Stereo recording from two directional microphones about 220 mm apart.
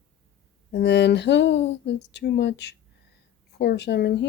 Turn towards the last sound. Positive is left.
turn(degrees=50)  # may be behind; listen again after turning